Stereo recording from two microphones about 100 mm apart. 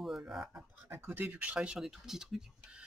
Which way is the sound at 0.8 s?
20° right (ahead or behind).